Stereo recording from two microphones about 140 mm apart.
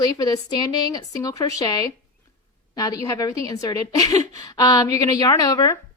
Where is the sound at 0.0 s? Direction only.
25° left (ahead or behind).